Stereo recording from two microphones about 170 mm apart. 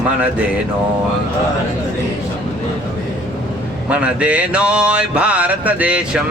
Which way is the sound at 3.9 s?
5° right (ahead or behind).